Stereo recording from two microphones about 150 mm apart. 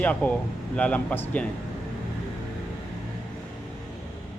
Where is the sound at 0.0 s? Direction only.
10° left (ahead or behind).